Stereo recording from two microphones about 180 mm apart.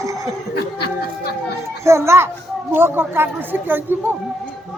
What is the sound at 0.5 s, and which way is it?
Speech, 60° left (ahead or behind).